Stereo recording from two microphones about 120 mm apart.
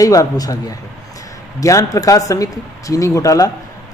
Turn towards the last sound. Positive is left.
turn(degrees=30)  # may be behind; listen again after turning